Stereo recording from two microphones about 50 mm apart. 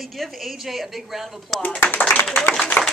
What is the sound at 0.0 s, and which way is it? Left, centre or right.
A woman's voice, centre.